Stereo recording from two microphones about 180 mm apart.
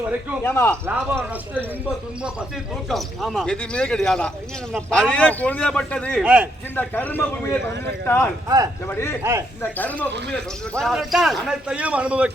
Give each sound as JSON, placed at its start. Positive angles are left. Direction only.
{"t": 0.4, "sound": "a man's voice", "side_deg": 10}
{"t": 0.9, "sound": "speech", "side_deg": -10}
{"t": 2.9, "sound": "a man's voice", "side_deg": 0}
{"t": 6.2, "sound": "speech", "side_deg": -5}
{"t": 6.7, "sound": "a man's voice", "side_deg": 10}
{"t": 8.4, "sound": "speech", "side_deg": -20}
{"t": 8.9, "sound": "a man's voice", "side_deg": 15}